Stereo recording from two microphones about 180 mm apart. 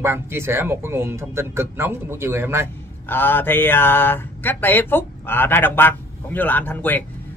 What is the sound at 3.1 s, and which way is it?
Speech, 10° left (ahead or behind).